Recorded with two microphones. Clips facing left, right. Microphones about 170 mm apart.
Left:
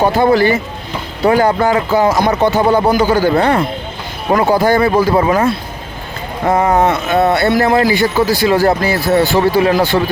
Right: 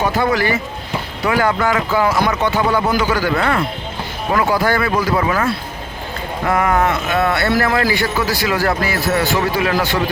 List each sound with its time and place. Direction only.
0.0 s a man's voice: 30° left (ahead or behind)
4.6 s a man's voice: 20° left (ahead or behind)
4.9 s a man's voice: 30° left (ahead or behind)